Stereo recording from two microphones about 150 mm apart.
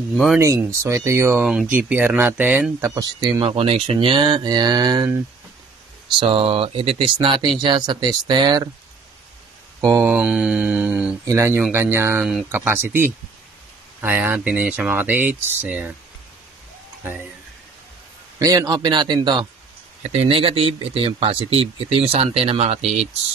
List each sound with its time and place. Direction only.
0.4 s speech: 20° right (ahead or behind)
1.4 s speech: 5° right (ahead or behind)
2.8 s speech: 25° right (ahead or behind)
6.1 s speech: 35° right (ahead or behind)
9.8 s speech: 20° right (ahead or behind)
12.2 s speech: 5° right (ahead or behind)
12.5 s speech: 15° right (ahead or behind)
18.4 s speech: 25° right (ahead or behind)
20.0 s speech: 45° right (ahead or behind)